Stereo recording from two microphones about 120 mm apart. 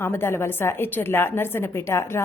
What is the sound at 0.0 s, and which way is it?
A woman's voice, 20° left (ahead or behind).